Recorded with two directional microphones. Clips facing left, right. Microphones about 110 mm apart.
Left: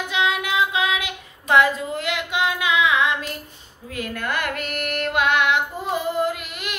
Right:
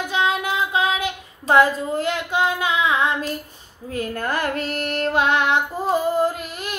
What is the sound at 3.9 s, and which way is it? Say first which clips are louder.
Music: right 3 dB; 35° right (ahead or behind).